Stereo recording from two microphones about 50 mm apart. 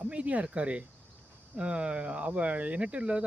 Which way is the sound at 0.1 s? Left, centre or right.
Right.